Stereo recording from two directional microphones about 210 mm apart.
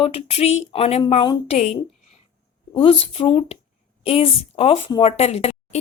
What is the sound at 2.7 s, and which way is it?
A woman's voice, 25° left (ahead or behind).